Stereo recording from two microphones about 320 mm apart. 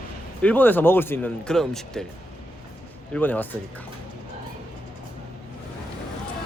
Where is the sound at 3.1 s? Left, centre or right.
Centre.